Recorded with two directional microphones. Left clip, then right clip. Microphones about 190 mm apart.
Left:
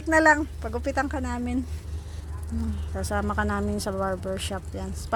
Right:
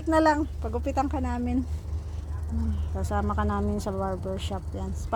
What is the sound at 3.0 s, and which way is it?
Speech, 10° left (ahead or behind).